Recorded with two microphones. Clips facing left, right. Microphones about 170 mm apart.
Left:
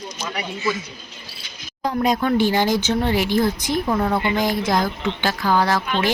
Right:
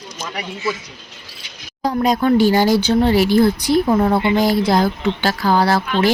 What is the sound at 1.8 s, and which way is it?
Speech, 35° right (ahead or behind).